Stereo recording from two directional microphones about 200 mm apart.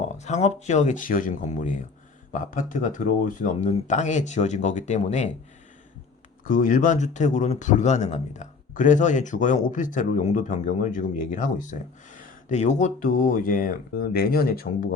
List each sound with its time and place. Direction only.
0.1 s speech: 35° left (ahead or behind)
6.4 s speech: 40° left (ahead or behind)